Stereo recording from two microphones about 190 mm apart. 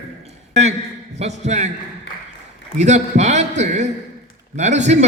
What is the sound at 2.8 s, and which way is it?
A man's voice, 40° right (ahead or behind).